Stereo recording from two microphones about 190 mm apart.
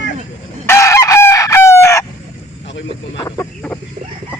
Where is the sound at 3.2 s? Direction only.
20° left (ahead or behind).